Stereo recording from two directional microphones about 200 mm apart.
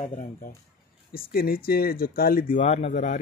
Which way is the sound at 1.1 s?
45° left (ahead or behind).